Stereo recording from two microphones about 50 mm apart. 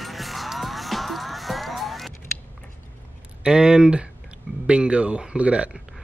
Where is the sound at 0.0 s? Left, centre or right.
Centre.